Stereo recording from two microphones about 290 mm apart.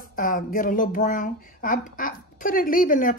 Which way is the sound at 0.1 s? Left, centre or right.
Left.